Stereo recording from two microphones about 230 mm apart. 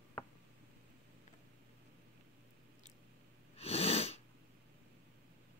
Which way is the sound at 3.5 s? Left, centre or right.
Left.